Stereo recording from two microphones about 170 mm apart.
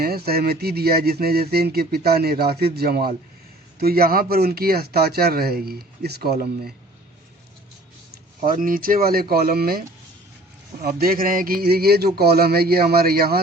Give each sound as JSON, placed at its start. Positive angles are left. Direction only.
{"t": 0.0, "sound": "speech", "side_deg": -65}
{"t": 8.4, "sound": "speech", "side_deg": -55}